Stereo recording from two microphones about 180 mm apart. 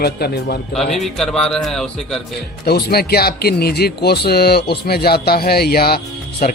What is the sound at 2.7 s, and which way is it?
Speech, 60° left (ahead or behind).